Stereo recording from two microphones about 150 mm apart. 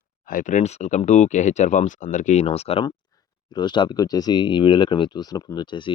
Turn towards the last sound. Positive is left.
turn(degrees=30)  # may be behind; listen again after turning